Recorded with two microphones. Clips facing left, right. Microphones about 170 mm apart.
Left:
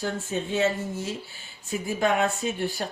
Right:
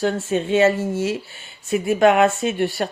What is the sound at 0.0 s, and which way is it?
Speech, 85° right.